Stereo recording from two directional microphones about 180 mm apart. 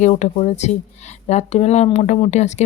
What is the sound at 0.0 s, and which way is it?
Speech, 40° left (ahead or behind).